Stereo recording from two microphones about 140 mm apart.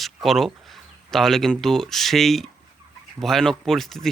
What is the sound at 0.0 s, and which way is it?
Speech, centre (ahead or behind).